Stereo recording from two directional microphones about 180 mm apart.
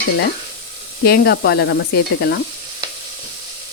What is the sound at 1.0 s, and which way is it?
Speech, 60° left (ahead or behind).